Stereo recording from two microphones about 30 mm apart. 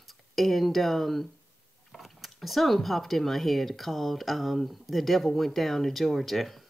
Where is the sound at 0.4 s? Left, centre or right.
Centre.